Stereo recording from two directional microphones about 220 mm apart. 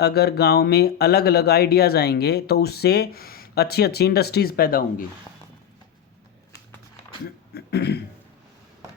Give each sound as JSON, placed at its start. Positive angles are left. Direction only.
{"t": 0.0, "sound": "speech", "side_deg": 45}
{"t": 7.5, "sound": "cough", "side_deg": 50}